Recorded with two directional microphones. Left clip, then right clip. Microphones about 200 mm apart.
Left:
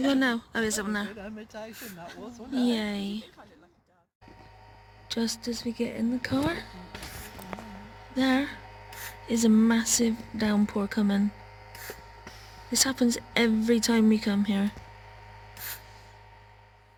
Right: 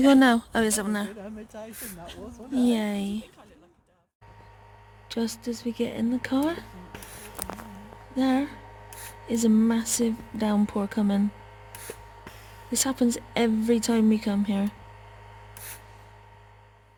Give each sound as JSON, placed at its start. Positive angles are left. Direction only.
{"t": 0.0, "sound": "a woman's voice", "side_deg": -35}
{"t": 1.2, "sound": "speech", "side_deg": 15}
{"t": 2.6, "sound": "speech", "side_deg": -15}
{"t": 5.0, "sound": "speech", "side_deg": -10}
{"t": 8.1, "sound": "speech", "side_deg": -5}
{"t": 12.7, "sound": "speech", "side_deg": -10}